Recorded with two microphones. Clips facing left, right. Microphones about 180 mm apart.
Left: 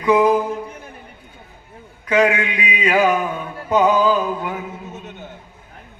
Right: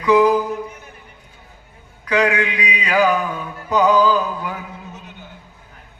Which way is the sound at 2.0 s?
25° left (ahead or behind).